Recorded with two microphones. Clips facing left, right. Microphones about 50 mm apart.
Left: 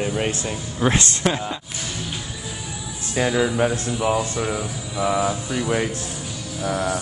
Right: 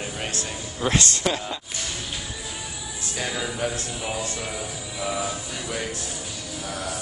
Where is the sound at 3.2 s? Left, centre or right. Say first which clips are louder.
Left 9 dB; left.